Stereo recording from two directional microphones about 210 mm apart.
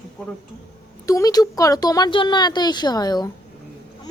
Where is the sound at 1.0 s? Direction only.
15° left (ahead or behind).